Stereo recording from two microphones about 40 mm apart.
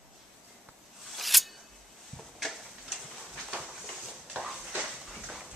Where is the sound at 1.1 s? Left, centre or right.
Centre.